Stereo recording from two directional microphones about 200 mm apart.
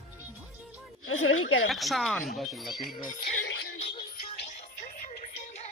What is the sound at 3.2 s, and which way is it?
Music, 55° left (ahead or behind).